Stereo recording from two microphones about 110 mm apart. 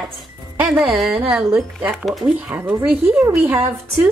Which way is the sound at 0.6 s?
5° right (ahead or behind).